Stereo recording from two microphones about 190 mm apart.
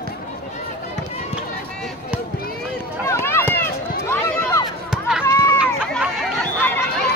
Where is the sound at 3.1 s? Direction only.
15° left (ahead or behind).